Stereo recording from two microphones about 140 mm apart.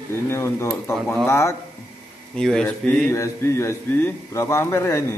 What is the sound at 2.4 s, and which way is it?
A man's voice, 5° left (ahead or behind).